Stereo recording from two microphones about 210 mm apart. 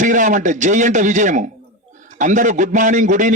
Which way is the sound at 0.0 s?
35° right (ahead or behind).